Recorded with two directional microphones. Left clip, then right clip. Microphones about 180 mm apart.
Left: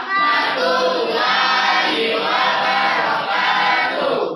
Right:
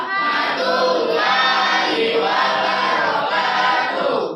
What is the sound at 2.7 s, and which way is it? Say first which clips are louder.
Music: left 1 dB; centre (ahead or behind).